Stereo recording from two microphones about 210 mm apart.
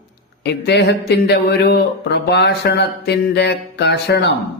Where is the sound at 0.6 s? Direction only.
50° left (ahead or behind).